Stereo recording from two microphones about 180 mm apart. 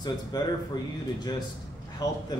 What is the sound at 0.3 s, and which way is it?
Speech, 20° left (ahead or behind).